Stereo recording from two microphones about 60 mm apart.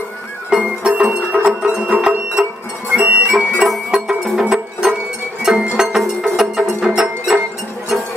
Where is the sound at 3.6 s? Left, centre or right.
Centre.